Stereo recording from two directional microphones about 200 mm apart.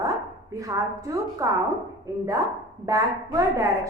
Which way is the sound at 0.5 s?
15° right (ahead or behind).